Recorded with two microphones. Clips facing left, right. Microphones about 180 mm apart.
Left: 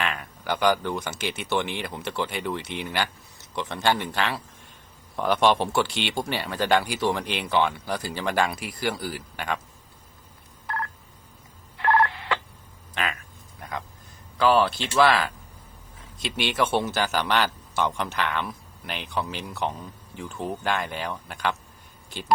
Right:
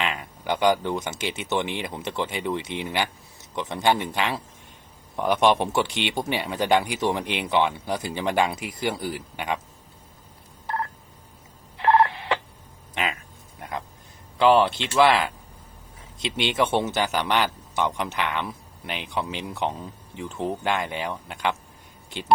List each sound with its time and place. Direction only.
0.0 s a man's voice: 20° right (ahead or behind)
11.8 s telephone dialing: 25° right (ahead or behind)
12.9 s speech: 20° right (ahead or behind)
13.6 s a sound: 25° right (ahead or behind)
14.3 s a man's voice: 20° right (ahead or behind)